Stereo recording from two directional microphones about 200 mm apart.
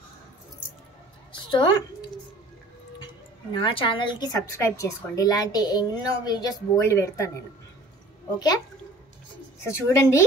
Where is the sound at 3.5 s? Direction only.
25° left (ahead or behind).